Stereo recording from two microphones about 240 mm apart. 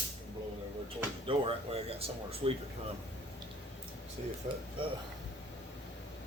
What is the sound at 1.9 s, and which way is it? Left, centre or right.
Speech, right.